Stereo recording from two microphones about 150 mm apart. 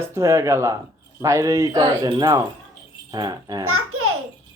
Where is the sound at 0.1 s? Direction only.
20° right (ahead or behind).